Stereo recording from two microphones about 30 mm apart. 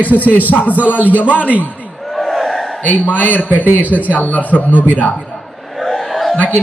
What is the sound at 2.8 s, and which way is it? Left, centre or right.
A man's voice, left.